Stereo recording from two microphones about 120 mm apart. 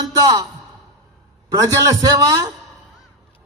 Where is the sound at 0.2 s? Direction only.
30° right (ahead or behind).